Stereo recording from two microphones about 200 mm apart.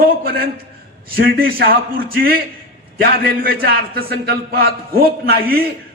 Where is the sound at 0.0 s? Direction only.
50° right (ahead or behind).